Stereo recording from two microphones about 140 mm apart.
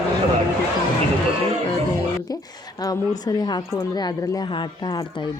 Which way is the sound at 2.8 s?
30° left (ahead or behind).